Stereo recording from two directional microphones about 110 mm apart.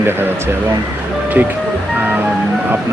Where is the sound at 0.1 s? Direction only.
20° right (ahead or behind).